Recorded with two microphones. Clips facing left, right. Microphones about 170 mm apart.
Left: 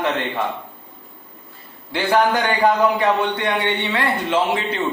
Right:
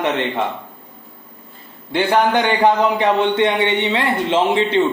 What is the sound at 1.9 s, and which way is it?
A man's voice, 25° right (ahead or behind).